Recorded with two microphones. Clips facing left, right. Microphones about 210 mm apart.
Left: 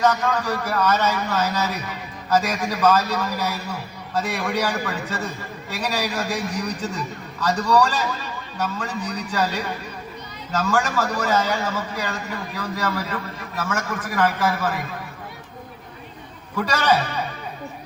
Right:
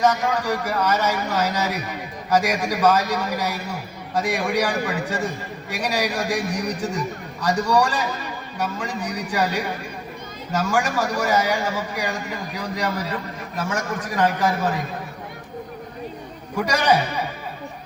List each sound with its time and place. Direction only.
0.0 s a man's voice: 10° right (ahead or behind)
16.6 s a man's voice: 15° right (ahead or behind)